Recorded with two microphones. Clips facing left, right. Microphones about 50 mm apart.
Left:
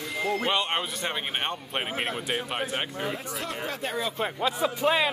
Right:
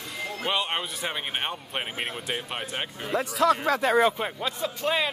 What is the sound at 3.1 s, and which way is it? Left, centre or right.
Speech, right.